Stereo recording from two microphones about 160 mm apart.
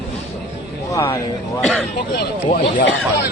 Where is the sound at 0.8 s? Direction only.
20° left (ahead or behind).